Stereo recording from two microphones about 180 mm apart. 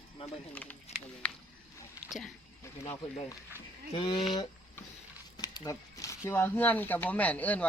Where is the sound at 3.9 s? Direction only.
25° left (ahead or behind).